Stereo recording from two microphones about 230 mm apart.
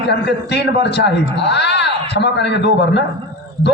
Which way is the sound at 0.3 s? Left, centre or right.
Left.